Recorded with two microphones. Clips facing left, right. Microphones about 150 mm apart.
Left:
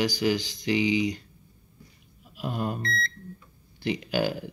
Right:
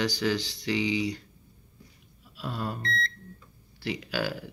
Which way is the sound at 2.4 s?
20° left (ahead or behind).